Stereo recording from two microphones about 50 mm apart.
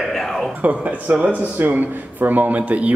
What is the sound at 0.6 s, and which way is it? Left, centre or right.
Speech, right.